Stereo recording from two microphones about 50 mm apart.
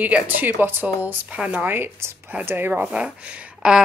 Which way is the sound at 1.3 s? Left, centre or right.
Right.